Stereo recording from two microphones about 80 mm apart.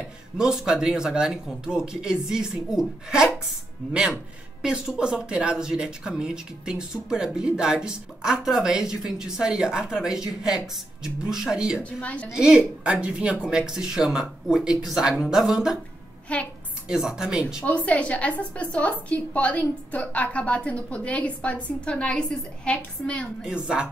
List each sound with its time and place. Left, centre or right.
0.4 s speech: centre
11.8 s a woman's voice: centre
12.3 s speech: centre
16.3 s a woman's voice: centre
16.8 s speech: centre
17.6 s a woman's voice: centre
23.4 s speech: centre